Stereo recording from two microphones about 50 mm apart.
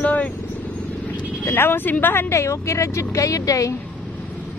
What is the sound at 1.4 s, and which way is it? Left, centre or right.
Speech, left.